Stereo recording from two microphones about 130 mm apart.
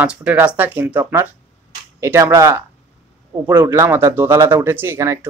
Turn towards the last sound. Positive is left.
turn(degrees=-20)  # may be behind; listen again after turning